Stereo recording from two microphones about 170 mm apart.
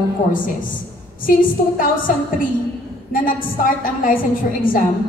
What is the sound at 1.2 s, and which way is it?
A woman's voice, 55° left (ahead or behind).